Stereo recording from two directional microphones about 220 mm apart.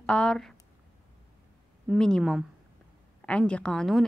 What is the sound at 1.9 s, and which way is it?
A woman's voice, 5° left (ahead or behind).